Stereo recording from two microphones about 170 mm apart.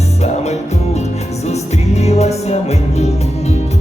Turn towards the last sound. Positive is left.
turn(degrees=40)  # may be behind; listen again after turning